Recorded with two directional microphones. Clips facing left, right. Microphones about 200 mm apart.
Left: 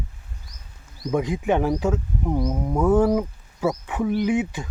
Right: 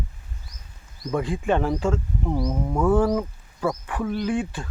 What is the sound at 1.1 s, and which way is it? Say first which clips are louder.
Speech: left 2 dB; 15° left (ahead or behind).